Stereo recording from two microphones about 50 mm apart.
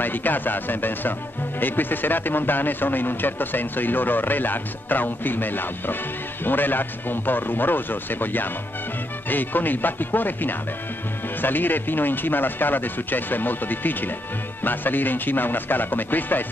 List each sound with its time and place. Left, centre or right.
0.0 s a man's voice: left